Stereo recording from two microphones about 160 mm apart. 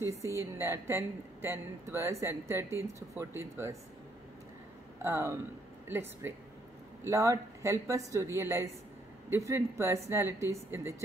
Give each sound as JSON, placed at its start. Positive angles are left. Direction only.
{"t": 0.0, "sound": "a woman's voice", "side_deg": -20}
{"t": 5.0, "sound": "a woman's voice", "side_deg": -15}